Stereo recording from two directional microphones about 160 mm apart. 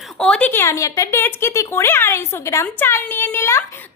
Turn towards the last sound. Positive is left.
turn(degrees=15)  # may be behind; listen again after turning